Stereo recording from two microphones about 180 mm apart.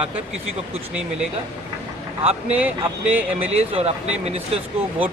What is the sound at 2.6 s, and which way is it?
Speech, 10° right (ahead or behind).